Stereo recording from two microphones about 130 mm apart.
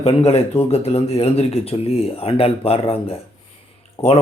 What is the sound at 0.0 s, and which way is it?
Speech, 50° left (ahead or behind).